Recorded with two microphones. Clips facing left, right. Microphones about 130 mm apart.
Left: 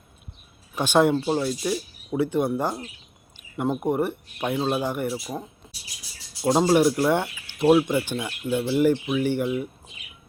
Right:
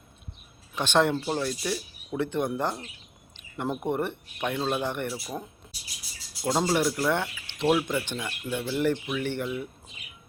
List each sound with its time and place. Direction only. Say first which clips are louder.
0.8 s speech: left 4 dB; 10° left (ahead or behind)
3.3 s a sound: left 5 dB; 10° left (ahead or behind)
3.9 s speech: left 4 dB; 5° left (ahead or behind)
6.7 s speech: left 6 dB; 15° left (ahead or behind)